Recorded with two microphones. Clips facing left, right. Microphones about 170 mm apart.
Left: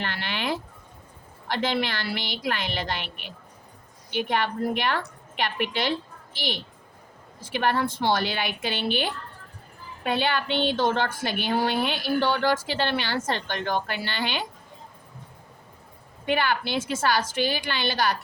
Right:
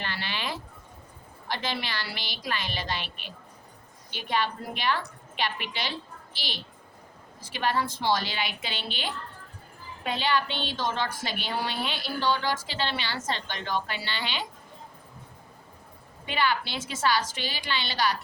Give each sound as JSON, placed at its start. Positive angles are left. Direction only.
{"t": 0.0, "sound": "a sound", "side_deg": 55}
{"t": 1.5, "sound": "a woman's voice", "side_deg": 55}
{"t": 16.2, "sound": "a woman's voice", "side_deg": 50}